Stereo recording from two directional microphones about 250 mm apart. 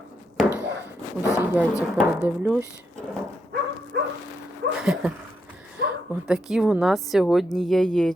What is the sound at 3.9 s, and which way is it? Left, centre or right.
Dog, right.